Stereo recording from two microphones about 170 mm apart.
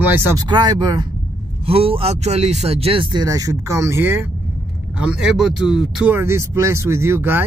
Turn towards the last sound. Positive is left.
turn(degrees=-15)  # may be behind; listen again after turning